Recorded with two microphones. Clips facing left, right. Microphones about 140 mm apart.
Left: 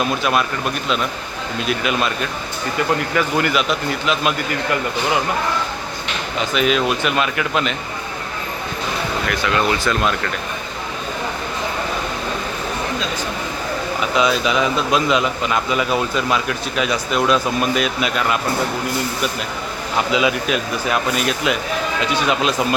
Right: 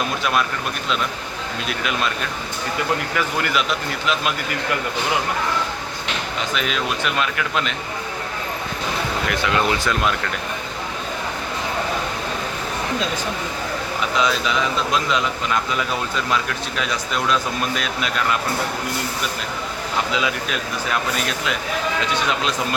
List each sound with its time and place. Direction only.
1.6 s speech: 5° left (ahead or behind)
3.2 s speech: centre (ahead or behind)
6.5 s speech: 5° left (ahead or behind)
9.3 s speech: 25° right (ahead or behind)
14.2 s a man's voice: 10° left (ahead or behind)
20.1 s a man's voice: 15° left (ahead or behind)